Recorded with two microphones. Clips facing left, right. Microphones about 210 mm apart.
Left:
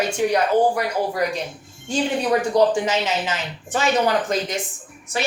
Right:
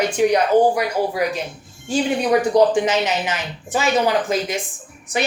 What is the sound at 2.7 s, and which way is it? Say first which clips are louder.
Speech: right 3 dB; 20° right (ahead or behind).